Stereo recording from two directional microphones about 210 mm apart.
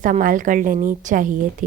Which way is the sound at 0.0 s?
40° right (ahead or behind).